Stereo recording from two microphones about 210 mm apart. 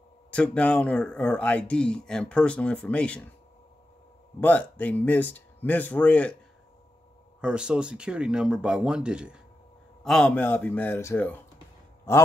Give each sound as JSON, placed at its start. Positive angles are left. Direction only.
{"t": 0.3, "sound": "speech", "side_deg": 5}
{"t": 4.4, "sound": "speech", "side_deg": 5}
{"t": 7.3, "sound": "speech", "side_deg": -5}